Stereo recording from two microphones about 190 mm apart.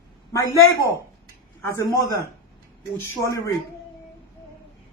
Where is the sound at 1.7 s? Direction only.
15° left (ahead or behind).